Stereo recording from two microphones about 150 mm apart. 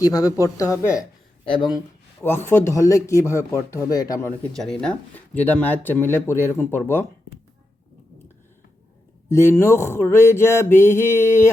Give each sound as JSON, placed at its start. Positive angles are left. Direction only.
{"t": 0.0, "sound": "speech", "side_deg": 25}
{"t": 1.5, "sound": "speech", "side_deg": 35}
{"t": 2.2, "sound": "speech", "side_deg": 15}
{"t": 4.3, "sound": "speech", "side_deg": 5}
{"t": 9.3, "sound": "speech", "side_deg": 15}